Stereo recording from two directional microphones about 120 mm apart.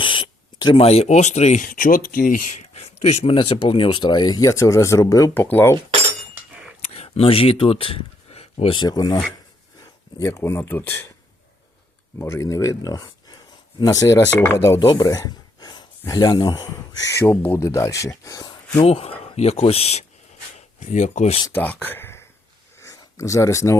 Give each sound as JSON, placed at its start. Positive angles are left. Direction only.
{"t": 0.0, "sound": "a sound", "side_deg": 45}
{"t": 0.9, "sound": "speech", "side_deg": 65}
{"t": 5.3, "sound": "speech", "side_deg": 15}
{"t": 6.8, "sound": "speech", "side_deg": 60}
{"t": 8.8, "sound": "speech", "side_deg": 35}
{"t": 10.2, "sound": "speech", "side_deg": 25}
{"t": 12.2, "sound": "speech", "side_deg": 25}
{"t": 18.9, "sound": "speech", "side_deg": 55}
{"t": 20.7, "sound": "speech", "side_deg": 80}
{"t": 21.5, "sound": "speech", "side_deg": 15}
{"t": 22.8, "sound": "a sound", "side_deg": 25}